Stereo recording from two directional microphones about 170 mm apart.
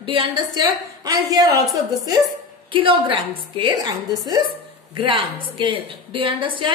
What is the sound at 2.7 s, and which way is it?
Speech, 30° right (ahead or behind).